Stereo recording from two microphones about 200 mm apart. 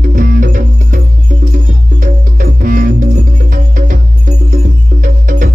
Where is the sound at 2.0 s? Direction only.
45° right (ahead or behind).